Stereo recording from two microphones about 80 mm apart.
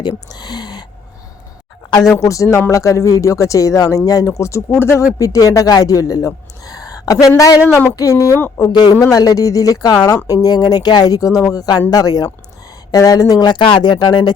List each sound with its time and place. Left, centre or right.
0.3 s a sound: left
1.9 s speech: left
2.1 s speech: left
5.1 s speech: left
8.7 s speech: left
9.1 s speech: left